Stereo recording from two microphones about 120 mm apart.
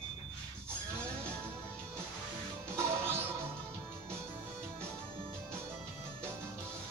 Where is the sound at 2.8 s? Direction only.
20° right (ahead or behind).